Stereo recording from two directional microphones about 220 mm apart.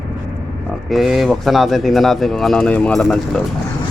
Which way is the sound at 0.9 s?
Centre (ahead or behind).